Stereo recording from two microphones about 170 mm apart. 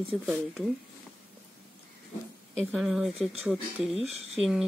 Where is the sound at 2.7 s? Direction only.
5° right (ahead or behind).